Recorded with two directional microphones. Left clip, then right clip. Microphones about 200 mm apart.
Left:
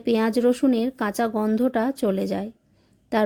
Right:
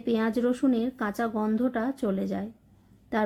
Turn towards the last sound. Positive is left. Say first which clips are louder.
# left 6 dB
turn(degrees=40)  # may be behind; listen again after turning